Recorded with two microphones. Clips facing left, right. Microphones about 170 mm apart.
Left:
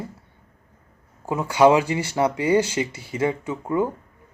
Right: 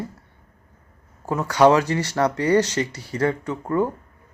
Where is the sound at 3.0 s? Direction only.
25° left (ahead or behind).